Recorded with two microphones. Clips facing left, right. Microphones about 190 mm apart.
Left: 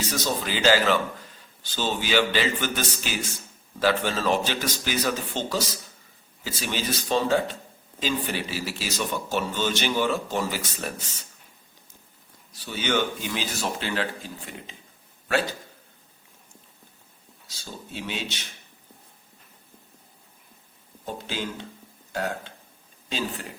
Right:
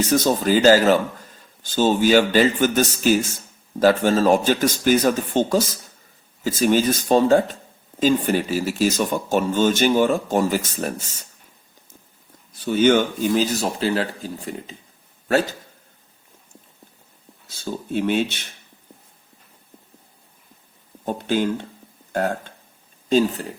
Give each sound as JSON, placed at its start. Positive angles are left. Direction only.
{"t": 0.1, "sound": "a man's voice", "side_deg": -50}
{"t": 12.5, "sound": "speech", "side_deg": -50}
{"t": 17.5, "sound": "a man's voice", "side_deg": -55}
{"t": 21.0, "sound": "a man's voice", "side_deg": -50}